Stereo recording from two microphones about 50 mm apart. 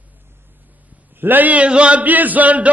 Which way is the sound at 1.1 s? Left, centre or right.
Right.